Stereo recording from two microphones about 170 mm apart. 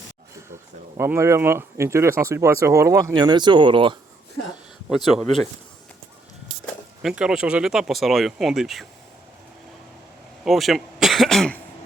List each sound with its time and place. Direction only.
0.9 s speech: 15° right (ahead or behind)
4.9 s speech: centre (ahead or behind)
6.7 s speech: 5° right (ahead or behind)
10.4 s speech: centre (ahead or behind)